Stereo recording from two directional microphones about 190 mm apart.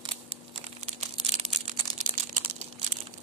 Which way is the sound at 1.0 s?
40° right (ahead or behind).